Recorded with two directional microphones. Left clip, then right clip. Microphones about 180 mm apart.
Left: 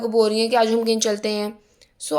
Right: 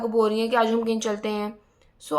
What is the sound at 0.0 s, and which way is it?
Speech, 10° left (ahead or behind).